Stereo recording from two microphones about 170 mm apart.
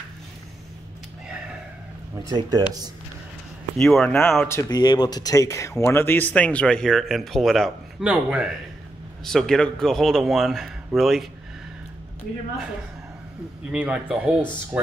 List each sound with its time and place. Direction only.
2.2 s speech: 20° right (ahead or behind)
3.7 s a man's voice: 5° left (ahead or behind)
4.5 s a man's voice: 20° left (ahead or behind); by 11.2 s centre (ahead or behind)
13.7 s a man's voice: 5° right (ahead or behind)